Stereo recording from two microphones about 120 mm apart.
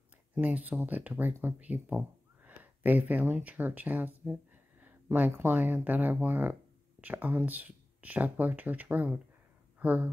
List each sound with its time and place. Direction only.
0.4 s speech: 10° right (ahead or behind)